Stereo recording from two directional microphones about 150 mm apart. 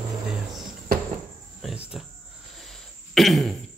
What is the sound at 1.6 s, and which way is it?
Cricket, 5° right (ahead or behind).